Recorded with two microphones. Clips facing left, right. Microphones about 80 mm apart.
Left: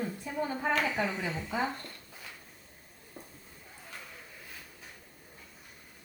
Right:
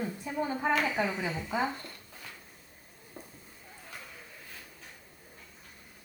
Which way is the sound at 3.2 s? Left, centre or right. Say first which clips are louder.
Right 1 dB; right.